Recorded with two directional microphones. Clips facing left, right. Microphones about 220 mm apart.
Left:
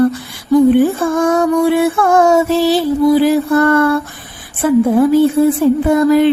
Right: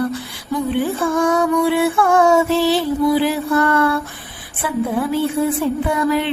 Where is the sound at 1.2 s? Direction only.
45° left (ahead or behind).